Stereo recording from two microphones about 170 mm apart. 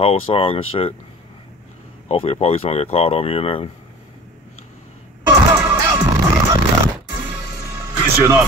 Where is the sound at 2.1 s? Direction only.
35° left (ahead or behind).